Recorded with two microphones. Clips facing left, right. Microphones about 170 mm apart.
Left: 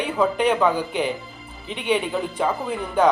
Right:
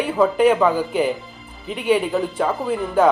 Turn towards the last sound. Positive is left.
turn(degrees=-5)  # may be behind; listen again after turning